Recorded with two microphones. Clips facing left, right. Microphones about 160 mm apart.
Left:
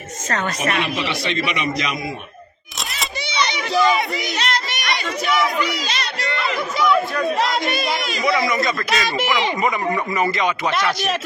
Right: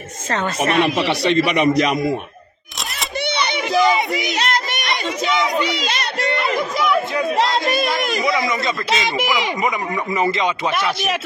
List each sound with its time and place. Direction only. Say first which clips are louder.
0.7 s a man's voice: right 6 dB; 65° right (ahead or behind); by 2.0 s 40° right (ahead or behind)
3.2 s a sound: right 3 dB; 60° right (ahead or behind)
3.6 s speech: right 2 dB; 15° right (ahead or behind)
4.4 s a sound: right 2 dB; 50° right (ahead or behind)
5.0 s speech: even; 25° right (ahead or behind)
5.9 s a child's voice: right 4 dB; 55° right (ahead or behind)
6.8 s speech: left 3 dB; 20° right (ahead or behind)
10.2 s speech: right 2 dB; 25° right (ahead or behind)
10.7 s speech: even; 10° right (ahead or behind)